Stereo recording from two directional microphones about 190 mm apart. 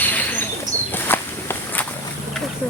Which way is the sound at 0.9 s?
10° left (ahead or behind).